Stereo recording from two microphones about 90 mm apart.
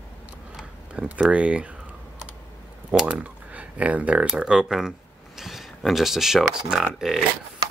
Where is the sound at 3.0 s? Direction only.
15° right (ahead or behind).